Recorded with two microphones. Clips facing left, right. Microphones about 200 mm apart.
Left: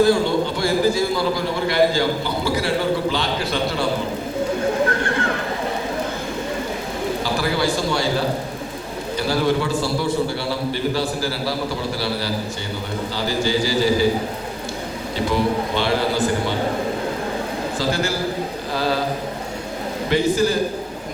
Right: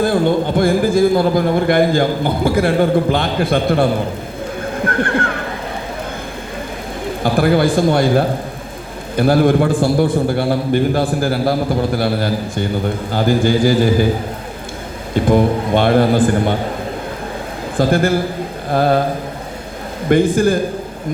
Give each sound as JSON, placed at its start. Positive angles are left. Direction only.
{"t": 0.0, "sound": "a man's voice", "side_deg": -50}
{"t": 4.9, "sound": "neigh", "side_deg": -55}
{"t": 7.2, "sound": "a man's voice", "side_deg": -55}
{"t": 15.1, "sound": "a man's voice", "side_deg": -50}
{"t": 17.7, "sound": "a man's voice", "side_deg": -55}
{"t": 20.1, "sound": "a man's voice", "side_deg": -50}